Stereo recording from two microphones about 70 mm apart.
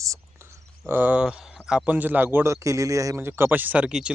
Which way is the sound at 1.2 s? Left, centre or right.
Centre.